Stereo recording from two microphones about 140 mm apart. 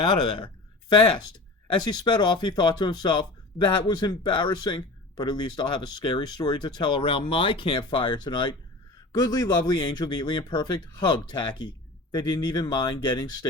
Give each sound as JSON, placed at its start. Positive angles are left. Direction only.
{"t": 0.0, "sound": "speech", "side_deg": 35}